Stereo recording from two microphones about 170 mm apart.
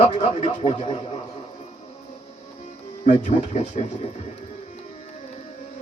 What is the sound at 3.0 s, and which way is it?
Speech, 45° left (ahead or behind).